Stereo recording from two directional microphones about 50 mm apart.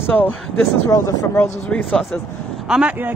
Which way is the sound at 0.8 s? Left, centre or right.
Left.